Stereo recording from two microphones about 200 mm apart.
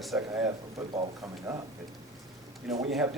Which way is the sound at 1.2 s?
15° right (ahead or behind).